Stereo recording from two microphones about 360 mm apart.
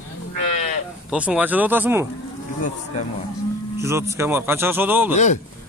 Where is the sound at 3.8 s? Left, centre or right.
Centre.